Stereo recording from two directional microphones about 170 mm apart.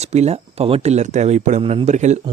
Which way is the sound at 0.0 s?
40° right (ahead or behind).